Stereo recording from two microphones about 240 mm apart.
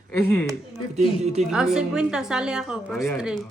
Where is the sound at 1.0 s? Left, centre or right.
Right.